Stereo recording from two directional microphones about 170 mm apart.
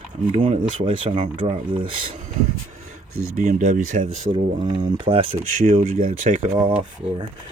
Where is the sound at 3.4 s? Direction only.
45° right (ahead or behind).